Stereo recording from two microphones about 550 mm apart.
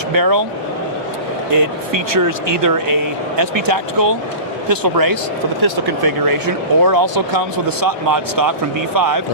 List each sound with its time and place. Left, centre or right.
0.1 s speech: right
2.6 s speech: right